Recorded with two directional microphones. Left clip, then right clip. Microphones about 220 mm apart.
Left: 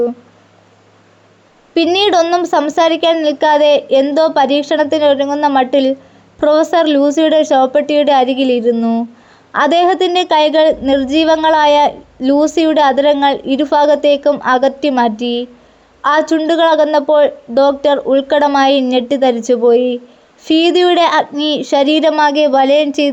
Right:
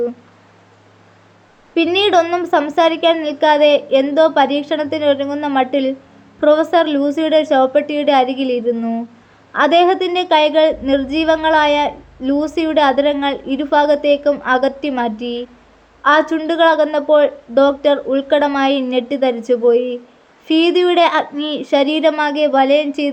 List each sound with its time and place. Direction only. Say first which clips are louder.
1.7 s a woman's voice: left 2 dB; 25° left (ahead or behind)